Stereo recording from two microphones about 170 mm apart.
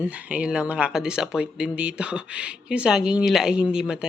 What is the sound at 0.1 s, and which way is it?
Speech, 5° right (ahead or behind).